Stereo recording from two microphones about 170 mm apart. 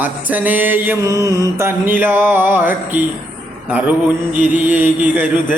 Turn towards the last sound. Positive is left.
turn(degrees=-10)  # may be behind; listen again after turning